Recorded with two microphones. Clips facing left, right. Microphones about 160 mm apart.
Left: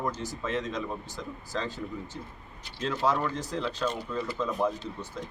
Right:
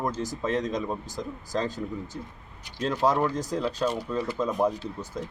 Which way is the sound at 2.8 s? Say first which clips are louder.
Right 3 dB; 40° right (ahead or behind).